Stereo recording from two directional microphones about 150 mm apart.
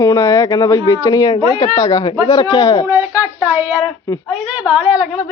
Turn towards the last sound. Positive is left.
turn(degrees=-10)  # may be behind; listen again after turning